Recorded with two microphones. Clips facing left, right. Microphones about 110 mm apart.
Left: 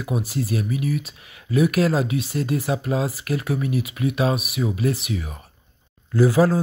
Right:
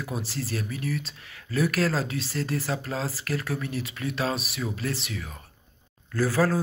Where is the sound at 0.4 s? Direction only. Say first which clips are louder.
Left 8 dB; 20° left (ahead or behind).